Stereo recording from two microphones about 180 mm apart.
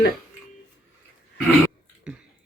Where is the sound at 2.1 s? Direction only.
5° right (ahead or behind).